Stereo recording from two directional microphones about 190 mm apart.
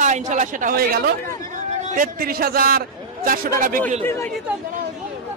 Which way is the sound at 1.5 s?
40° right (ahead or behind).